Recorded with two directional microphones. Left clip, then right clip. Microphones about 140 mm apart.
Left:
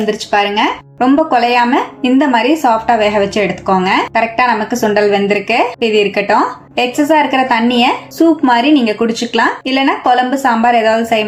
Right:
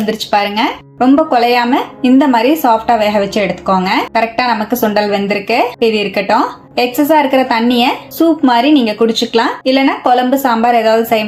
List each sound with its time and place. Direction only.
0.1 s a woman's voice: 30° right (ahead or behind)